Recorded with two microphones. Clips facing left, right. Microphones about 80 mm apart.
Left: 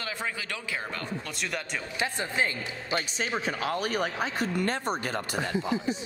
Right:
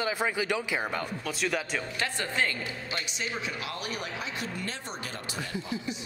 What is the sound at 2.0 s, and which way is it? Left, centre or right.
Speech, left.